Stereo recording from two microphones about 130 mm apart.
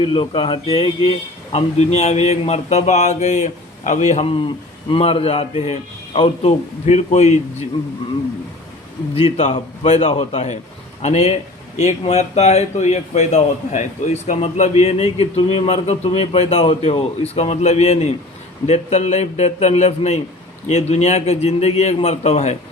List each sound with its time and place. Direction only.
0.0 s a man's voice: 40° left (ahead or behind)
1.5 s speech: 60° left (ahead or behind)
4.3 s a man's voice: 40° left (ahead or behind); by 7.7 s 60° left (ahead or behind)
9.1 s a man's voice: 50° left (ahead or behind)